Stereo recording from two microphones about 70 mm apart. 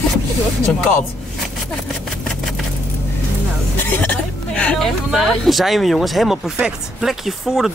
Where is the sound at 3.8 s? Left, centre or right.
Left.